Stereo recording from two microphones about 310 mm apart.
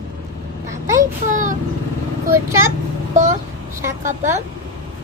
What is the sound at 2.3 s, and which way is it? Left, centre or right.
Speech, centre.